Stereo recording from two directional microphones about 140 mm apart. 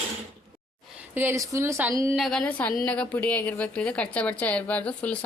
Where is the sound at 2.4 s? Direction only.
10° left (ahead or behind).